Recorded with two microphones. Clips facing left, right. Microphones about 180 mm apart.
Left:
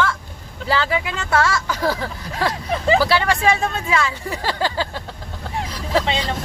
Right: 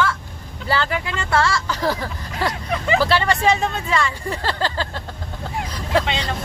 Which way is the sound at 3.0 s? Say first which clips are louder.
Left 1 dB; 5° left (ahead or behind).